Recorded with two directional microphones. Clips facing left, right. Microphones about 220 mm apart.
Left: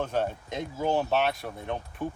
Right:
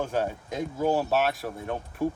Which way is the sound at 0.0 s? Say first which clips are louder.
Right 1 dB; 5° right (ahead or behind).